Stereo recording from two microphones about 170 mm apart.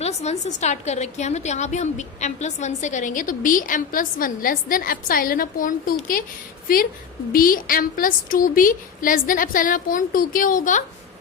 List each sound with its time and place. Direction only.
0.0 s a woman's voice: 40° left (ahead or behind)